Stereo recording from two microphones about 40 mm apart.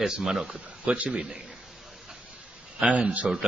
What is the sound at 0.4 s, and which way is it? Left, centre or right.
Speech, right.